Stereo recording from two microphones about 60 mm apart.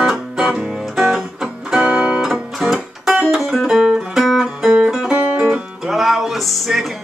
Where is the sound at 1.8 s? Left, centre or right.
Centre.